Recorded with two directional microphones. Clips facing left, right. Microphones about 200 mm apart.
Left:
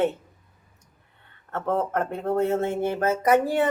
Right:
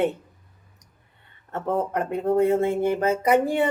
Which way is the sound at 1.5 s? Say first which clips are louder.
Even; 15° right (ahead or behind).